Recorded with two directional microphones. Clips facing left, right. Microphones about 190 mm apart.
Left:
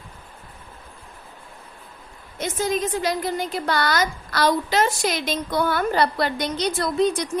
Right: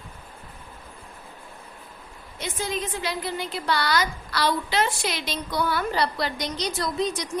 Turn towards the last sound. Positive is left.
turn(degrees=55)  # may be behind; listen again after turning